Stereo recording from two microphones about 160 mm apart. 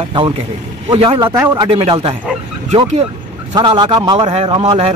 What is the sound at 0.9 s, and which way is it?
Speech, 30° right (ahead or behind).